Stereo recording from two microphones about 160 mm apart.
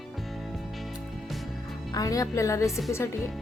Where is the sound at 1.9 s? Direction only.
20° left (ahead or behind).